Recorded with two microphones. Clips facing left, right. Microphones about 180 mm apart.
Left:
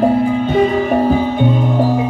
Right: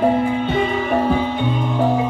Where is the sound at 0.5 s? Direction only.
40° left (ahead or behind).